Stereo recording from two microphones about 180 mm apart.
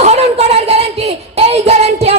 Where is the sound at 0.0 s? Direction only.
40° right (ahead or behind).